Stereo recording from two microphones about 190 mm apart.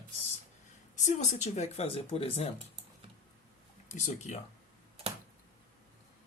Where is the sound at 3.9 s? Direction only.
40° left (ahead or behind).